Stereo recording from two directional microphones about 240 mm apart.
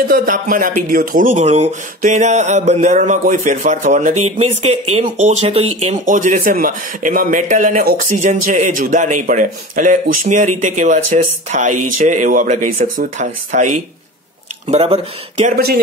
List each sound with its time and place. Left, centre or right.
0.1 s speech: right
14.7 s speech: right
15.4 s speech: right